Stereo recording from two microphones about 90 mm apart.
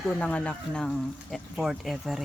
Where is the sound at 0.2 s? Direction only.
10° left (ahead or behind).